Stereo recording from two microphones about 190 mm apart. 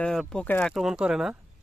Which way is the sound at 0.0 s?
5° left (ahead or behind).